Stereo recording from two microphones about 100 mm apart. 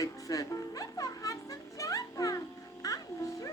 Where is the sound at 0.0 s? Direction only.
35° left (ahead or behind).